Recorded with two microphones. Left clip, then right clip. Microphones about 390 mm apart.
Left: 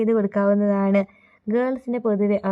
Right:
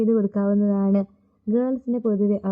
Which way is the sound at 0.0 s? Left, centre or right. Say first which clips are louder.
Left 2 dB; centre.